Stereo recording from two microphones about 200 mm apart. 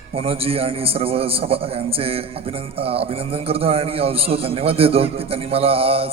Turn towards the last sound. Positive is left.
turn(degrees=-30)  # may be behind; listen again after turning